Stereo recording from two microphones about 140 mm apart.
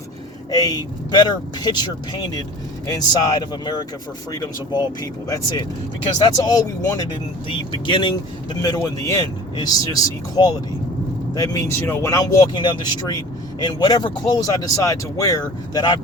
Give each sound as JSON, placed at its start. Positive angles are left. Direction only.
{"t": 0.5, "sound": "speech", "side_deg": 30}
{"t": 8.6, "sound": "speech", "side_deg": 25}